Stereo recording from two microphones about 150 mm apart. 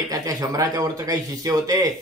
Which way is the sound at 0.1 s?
25° right (ahead or behind).